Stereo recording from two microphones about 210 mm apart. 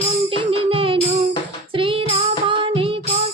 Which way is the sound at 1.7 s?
25° right (ahead or behind).